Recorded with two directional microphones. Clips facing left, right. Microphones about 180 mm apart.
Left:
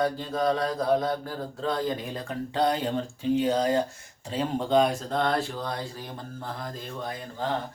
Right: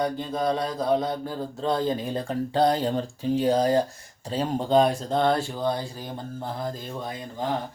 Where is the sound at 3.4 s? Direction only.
35° right (ahead or behind).